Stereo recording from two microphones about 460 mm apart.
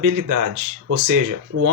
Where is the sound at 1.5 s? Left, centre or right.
Right.